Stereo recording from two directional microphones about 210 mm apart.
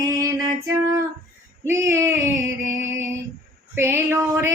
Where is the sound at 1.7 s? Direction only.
15° right (ahead or behind).